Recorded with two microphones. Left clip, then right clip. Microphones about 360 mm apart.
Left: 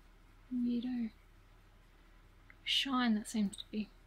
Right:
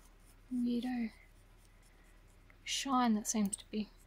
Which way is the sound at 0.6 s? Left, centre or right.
Centre.